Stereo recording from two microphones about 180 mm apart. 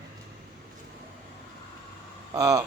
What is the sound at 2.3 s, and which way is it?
Speech, 20° right (ahead or behind).